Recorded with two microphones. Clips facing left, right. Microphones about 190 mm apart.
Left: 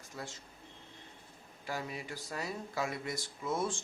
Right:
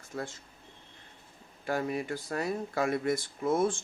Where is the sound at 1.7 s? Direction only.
55° right (ahead or behind).